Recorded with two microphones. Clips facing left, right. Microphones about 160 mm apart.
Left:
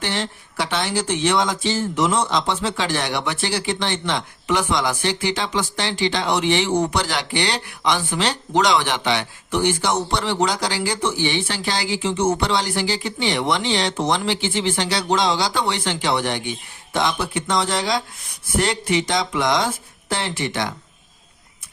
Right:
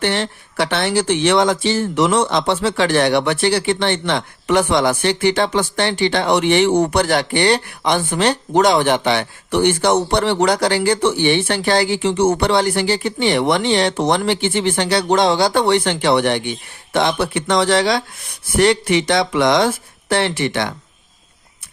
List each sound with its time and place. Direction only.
0.0 s speech: 60° right (ahead or behind)